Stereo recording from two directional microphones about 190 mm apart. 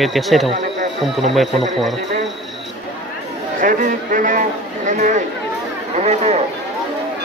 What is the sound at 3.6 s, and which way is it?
A man's voice, 45° right (ahead or behind).